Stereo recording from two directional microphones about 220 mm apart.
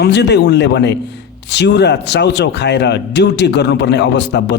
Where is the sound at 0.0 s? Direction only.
50° left (ahead or behind).